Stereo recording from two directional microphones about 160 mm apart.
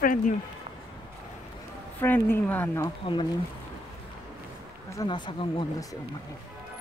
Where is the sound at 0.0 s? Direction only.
55° left (ahead or behind).